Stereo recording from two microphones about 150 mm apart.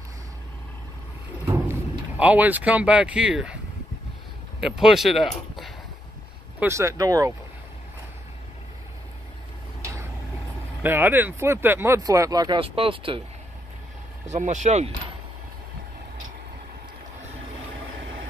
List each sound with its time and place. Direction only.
1.6 s speech: 10° right (ahead or behind)
4.6 s speech: centre (ahead or behind)
6.6 s speech: 20° right (ahead or behind)
10.8 s speech: 15° right (ahead or behind)
12.5 s speech: 40° right (ahead or behind)
14.2 s speech: 50° right (ahead or behind)